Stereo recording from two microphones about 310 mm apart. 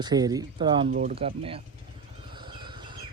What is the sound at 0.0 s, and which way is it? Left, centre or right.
Speech, centre.